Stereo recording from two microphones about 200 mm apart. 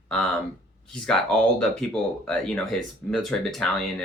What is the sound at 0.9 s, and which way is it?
Speech, 5° left (ahead or behind).